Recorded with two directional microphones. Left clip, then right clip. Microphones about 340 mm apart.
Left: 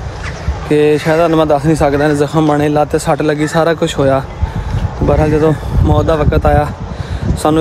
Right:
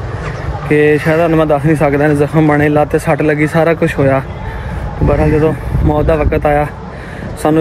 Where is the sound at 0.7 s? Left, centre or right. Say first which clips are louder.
Even; centre.